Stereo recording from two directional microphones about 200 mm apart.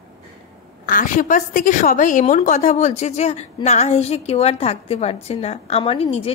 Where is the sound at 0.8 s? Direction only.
40° left (ahead or behind).